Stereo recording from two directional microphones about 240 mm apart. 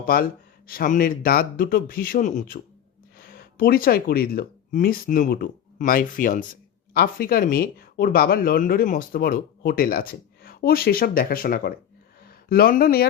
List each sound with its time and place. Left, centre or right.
0.0 s speech: left